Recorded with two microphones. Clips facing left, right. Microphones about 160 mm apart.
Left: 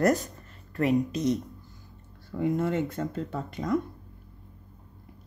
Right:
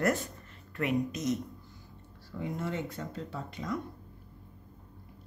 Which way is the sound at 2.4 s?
55° left (ahead or behind).